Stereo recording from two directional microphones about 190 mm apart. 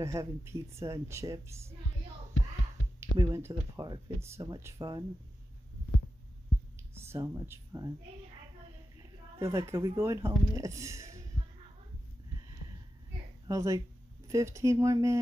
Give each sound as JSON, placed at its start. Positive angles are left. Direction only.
{"t": 0.0, "sound": "speech", "side_deg": -15}
{"t": 3.0, "sound": "speech", "side_deg": -15}
{"t": 6.8, "sound": "speech", "side_deg": -15}
{"t": 9.4, "sound": "speech", "side_deg": -15}
{"t": 13.5, "sound": "speech", "side_deg": -15}